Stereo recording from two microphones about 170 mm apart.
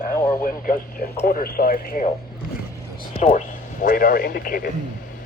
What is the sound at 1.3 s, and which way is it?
Speech, 60° left (ahead or behind).